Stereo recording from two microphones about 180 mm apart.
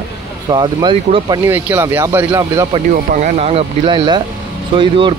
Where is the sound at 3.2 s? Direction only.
35° right (ahead or behind).